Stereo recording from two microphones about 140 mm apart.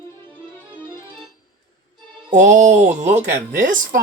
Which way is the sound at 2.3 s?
60° right (ahead or behind).